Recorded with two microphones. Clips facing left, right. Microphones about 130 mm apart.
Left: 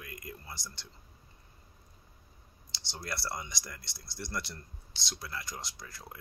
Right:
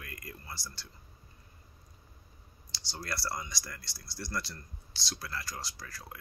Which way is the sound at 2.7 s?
25° left (ahead or behind).